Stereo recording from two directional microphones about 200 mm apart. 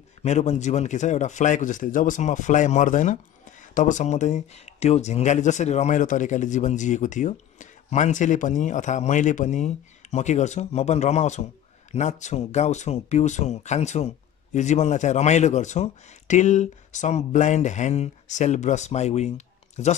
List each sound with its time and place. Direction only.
0.2 s speech: 35° left (ahead or behind)